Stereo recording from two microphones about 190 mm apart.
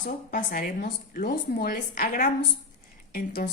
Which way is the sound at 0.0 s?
55° left (ahead or behind).